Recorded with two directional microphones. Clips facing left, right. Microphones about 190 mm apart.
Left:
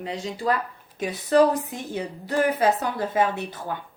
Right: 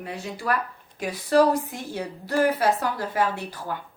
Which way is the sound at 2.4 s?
20° left (ahead or behind).